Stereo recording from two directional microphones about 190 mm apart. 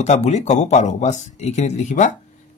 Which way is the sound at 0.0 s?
35° left (ahead or behind).